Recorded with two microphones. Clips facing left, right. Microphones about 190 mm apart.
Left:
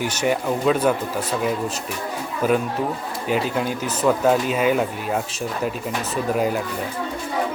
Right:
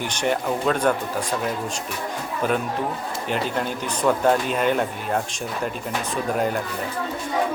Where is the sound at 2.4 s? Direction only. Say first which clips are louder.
Left 3 dB; 5° left (ahead or behind).